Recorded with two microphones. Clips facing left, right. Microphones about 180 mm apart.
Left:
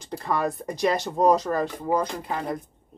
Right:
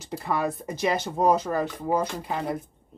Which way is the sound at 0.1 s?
5° right (ahead or behind).